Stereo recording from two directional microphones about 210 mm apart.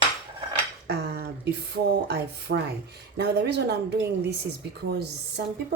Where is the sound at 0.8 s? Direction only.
50° right (ahead or behind).